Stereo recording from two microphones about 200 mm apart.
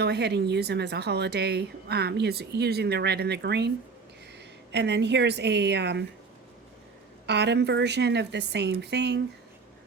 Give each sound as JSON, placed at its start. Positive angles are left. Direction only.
{"t": 0.0, "sound": "speech", "side_deg": -55}
{"t": 4.7, "sound": "speech", "side_deg": -60}
{"t": 7.3, "sound": "speech", "side_deg": -60}